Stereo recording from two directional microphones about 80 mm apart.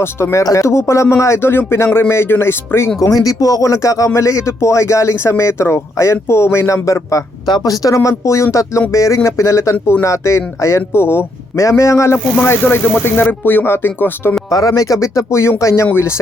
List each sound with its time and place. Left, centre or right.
0.0 s speech: left
3.0 s speech: left
7.4 s speech: left
12.4 s speech: left
14.5 s speech: left